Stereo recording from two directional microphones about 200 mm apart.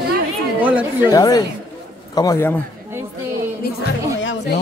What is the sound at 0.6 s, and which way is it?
Speech, 10° right (ahead or behind).